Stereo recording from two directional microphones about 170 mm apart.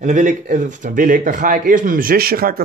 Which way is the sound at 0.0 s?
50° right (ahead or behind).